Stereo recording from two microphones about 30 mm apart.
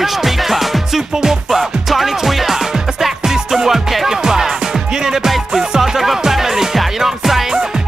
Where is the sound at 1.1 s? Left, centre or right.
Right.